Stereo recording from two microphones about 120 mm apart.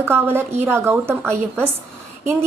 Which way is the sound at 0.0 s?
20° right (ahead or behind).